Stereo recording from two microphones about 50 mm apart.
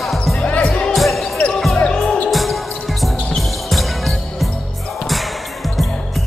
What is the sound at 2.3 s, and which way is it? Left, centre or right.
Music, centre.